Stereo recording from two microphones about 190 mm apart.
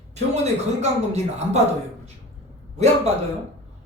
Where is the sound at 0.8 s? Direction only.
35° right (ahead or behind).